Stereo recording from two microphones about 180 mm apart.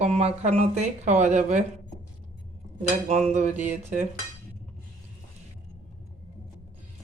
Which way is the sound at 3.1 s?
35° right (ahead or behind).